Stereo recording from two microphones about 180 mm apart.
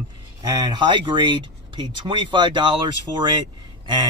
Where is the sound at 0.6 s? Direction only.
25° right (ahead or behind).